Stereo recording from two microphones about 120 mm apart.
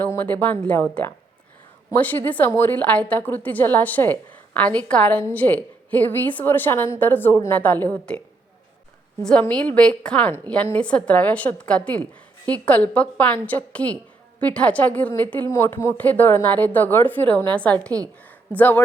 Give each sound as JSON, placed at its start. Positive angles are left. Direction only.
{"t": 0.0, "sound": "a woman's voice", "side_deg": 15}
{"t": 9.4, "sound": "a woman's voice", "side_deg": 10}